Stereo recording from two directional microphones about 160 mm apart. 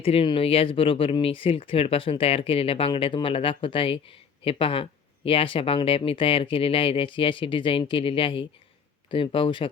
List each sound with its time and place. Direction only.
0.0 s speech: 35° left (ahead or behind)